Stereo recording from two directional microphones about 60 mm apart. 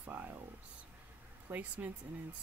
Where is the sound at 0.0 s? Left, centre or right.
Right.